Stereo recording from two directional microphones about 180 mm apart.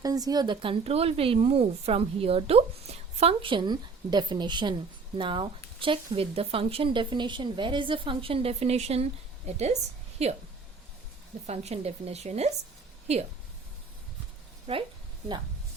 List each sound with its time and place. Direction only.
0.0 s speech: 20° right (ahead or behind); by 9.0 s 35° right (ahead or behind)
10.2 s speech: 35° right (ahead or behind)
11.4 s speech: 35° right (ahead or behind)
14.7 s speech: 35° right (ahead or behind)